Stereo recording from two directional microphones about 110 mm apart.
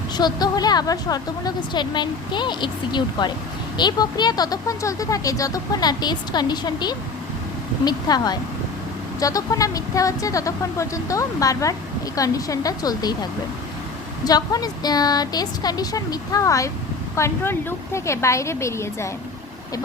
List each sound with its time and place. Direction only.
0.2 s a woman's voice: 40° left (ahead or behind)
14.3 s a woman's voice: 35° left (ahead or behind)